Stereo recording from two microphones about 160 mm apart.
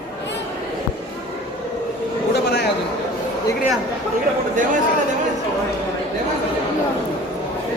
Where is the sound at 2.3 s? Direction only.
90° left.